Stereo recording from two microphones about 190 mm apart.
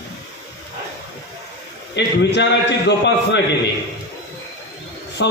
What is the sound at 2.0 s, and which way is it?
A man's voice, 65° left (ahead or behind).